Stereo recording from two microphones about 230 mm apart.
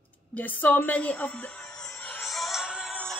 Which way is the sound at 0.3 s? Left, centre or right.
Centre.